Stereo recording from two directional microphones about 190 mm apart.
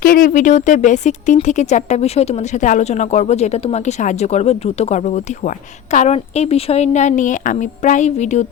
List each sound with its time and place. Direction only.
0.0 s speech: 50° left (ahead or behind)